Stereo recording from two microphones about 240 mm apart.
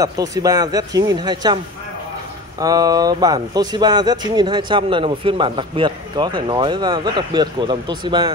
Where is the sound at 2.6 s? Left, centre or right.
Centre.